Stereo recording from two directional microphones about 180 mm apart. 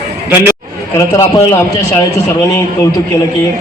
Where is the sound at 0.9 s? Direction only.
15° left (ahead or behind).